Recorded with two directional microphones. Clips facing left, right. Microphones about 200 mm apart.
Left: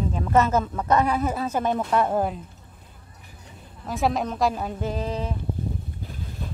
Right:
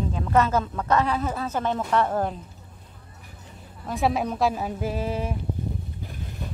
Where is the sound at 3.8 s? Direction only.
Centre (ahead or behind).